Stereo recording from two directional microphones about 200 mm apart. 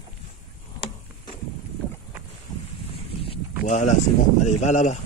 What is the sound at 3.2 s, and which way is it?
Boat, 30° left (ahead or behind).